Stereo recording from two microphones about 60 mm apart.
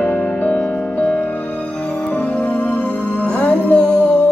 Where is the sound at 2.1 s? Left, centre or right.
Left.